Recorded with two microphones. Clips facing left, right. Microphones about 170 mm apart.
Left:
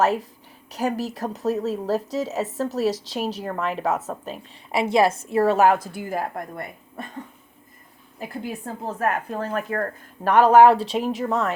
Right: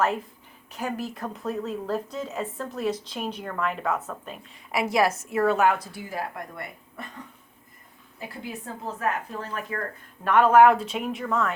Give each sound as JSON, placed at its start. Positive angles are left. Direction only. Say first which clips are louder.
{"t": 0.7, "sound": "a woman's voice", "louder": "left 6 dB", "side_deg": 40}
{"t": 8.3, "sound": "a woman's voice", "louder": "left 5 dB", "side_deg": 50}